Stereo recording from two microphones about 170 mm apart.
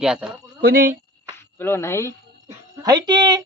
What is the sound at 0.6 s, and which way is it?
Speech, 60° right (ahead or behind).